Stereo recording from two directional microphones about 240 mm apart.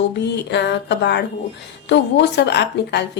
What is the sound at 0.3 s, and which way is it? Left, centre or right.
A woman's voice, left.